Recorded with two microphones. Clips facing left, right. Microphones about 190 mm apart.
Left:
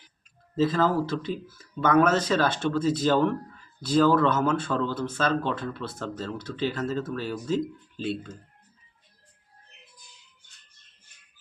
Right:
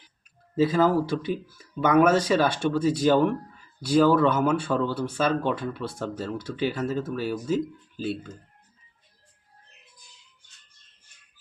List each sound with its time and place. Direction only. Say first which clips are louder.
0.5 s speech: right 2 dB; 10° right (ahead or behind)